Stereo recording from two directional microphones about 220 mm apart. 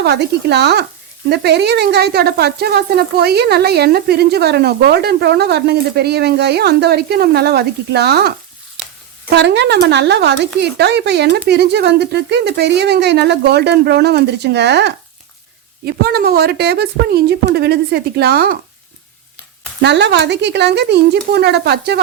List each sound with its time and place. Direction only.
0.0 s speech: 50° right (ahead or behind)
8.8 s sizzle: centre (ahead or behind)
9.3 s speech: 50° right (ahead or behind)
19.8 s speech: 50° right (ahead or behind)